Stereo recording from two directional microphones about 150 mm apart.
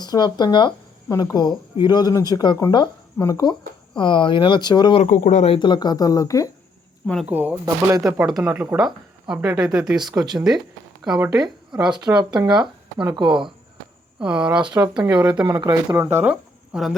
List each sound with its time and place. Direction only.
0.0 s speech: 30° left (ahead or behind)
5.0 s speech: 55° left (ahead or behind)
5.5 s speech: 30° left (ahead or behind)
7.3 s speech: 10° right (ahead or behind)
7.6 s speech: 20° right (ahead or behind)
8.2 s speech: 5° right (ahead or behind)
10.1 s speech: 25° right (ahead or behind)
11.0 s speech: 10° right (ahead or behind)
12.0 s speech: 30° right (ahead or behind)
14.2 s speech: 10° right (ahead or behind)
14.6 s speech: 25° right (ahead or behind)
15.0 s speech: 15° right (ahead or behind)
15.4 s speech: 25° right (ahead or behind)
16.1 s speech: 10° right (ahead or behind)